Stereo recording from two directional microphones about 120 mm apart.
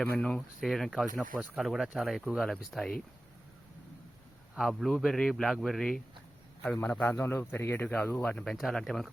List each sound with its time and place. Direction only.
0.0 s speech: 5° left (ahead or behind)
4.5 s speech: centre (ahead or behind)